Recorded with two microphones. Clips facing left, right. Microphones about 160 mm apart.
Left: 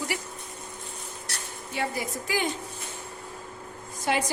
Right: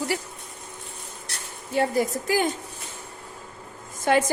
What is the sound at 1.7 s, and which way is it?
Speech, 45° right (ahead or behind).